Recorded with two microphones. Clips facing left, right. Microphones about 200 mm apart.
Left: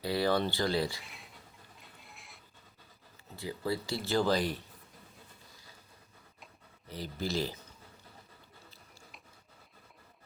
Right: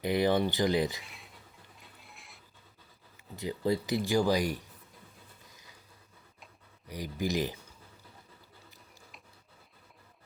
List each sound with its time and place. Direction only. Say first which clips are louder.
0.0 s speech: right 3 dB; 20° right (ahead or behind)
1.0 s a sound: even; centre (ahead or behind)
3.3 s speech: right 4 dB; 20° right (ahead or behind)
6.8 s speech: right 3 dB; 15° right (ahead or behind)